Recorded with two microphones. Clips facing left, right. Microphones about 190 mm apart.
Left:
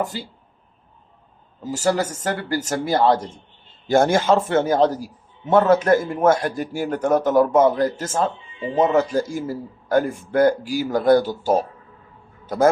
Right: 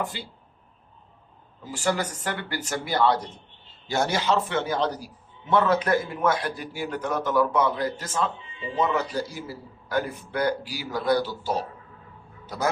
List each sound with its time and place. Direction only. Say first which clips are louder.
0.0 s a man's voice: left 5 dB; 40° left (ahead or behind)
1.6 s a man's voice: left 6 dB; 40° left (ahead or behind)